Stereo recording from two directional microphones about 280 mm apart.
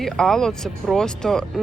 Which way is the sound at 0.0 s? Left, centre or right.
Centre.